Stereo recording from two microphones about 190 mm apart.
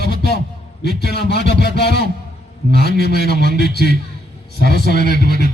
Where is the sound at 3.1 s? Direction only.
60° left (ahead or behind).